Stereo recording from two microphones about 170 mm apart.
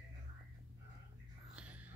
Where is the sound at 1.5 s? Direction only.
10° right (ahead or behind).